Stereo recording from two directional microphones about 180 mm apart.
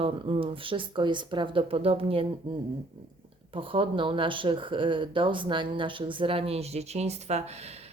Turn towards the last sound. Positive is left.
turn(degrees=-35)  # may be behind; listen again after turning